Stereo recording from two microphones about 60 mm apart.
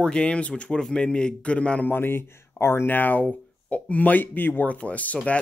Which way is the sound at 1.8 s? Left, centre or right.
Left.